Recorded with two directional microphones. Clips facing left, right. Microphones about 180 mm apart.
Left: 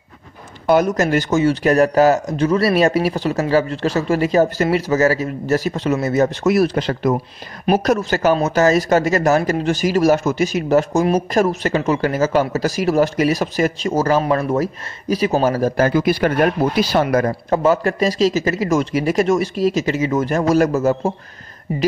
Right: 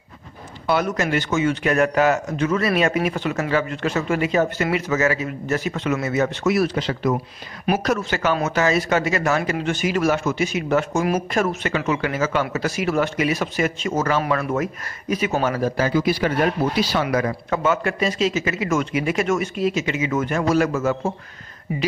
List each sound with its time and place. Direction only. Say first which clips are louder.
0.7 s speech: left 6 dB; 40° left (ahead or behind)
17.3 s speech: left 5 dB; 35° left (ahead or behind)